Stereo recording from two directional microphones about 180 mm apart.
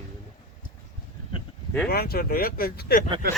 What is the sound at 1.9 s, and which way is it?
Speech, 55° left (ahead or behind).